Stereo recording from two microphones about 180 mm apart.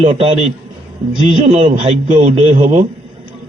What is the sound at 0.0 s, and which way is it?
Speech, 35° right (ahead or behind).